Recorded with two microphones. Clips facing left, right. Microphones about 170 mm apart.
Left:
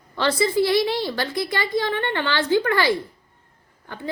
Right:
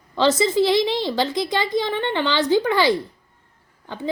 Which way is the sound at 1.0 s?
20° right (ahead or behind).